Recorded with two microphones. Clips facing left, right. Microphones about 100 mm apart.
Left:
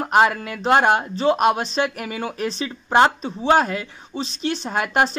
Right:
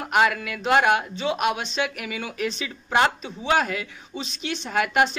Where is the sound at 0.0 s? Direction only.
35° left (ahead or behind).